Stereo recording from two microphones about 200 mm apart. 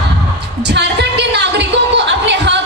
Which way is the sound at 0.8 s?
60° right (ahead or behind).